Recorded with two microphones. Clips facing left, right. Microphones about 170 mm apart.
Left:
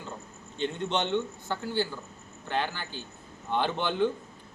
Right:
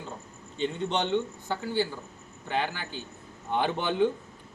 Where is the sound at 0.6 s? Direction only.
10° right (ahead or behind).